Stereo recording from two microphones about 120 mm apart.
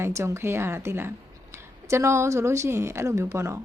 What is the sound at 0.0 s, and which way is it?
Speech, 25° right (ahead or behind).